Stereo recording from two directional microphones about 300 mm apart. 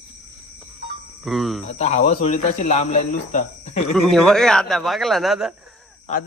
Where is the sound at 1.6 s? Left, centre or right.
Left.